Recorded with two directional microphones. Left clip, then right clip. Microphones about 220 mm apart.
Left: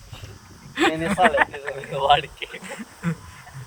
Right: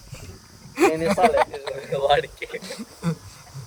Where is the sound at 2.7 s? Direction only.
50° right (ahead or behind).